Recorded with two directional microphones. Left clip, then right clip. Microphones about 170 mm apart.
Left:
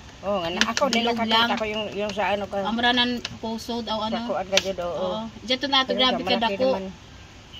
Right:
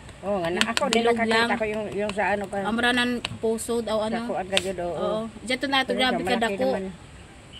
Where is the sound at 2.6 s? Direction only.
40° right (ahead or behind).